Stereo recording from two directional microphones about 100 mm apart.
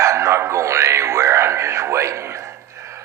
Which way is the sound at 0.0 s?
30° right (ahead or behind).